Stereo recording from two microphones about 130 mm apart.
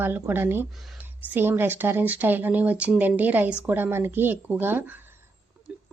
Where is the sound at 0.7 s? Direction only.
Centre (ahead or behind).